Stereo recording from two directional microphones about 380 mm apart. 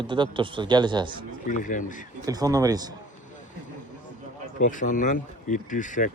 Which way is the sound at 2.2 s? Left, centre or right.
Centre.